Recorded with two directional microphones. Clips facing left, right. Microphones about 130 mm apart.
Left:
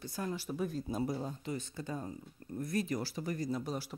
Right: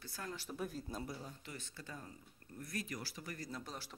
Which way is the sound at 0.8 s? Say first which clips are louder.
Left 10 dB; 15° left (ahead or behind).